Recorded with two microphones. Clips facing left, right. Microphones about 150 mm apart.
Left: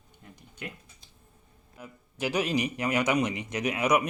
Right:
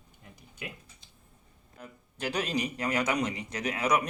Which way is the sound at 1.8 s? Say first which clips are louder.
Left 4 dB; 10° left (ahead or behind).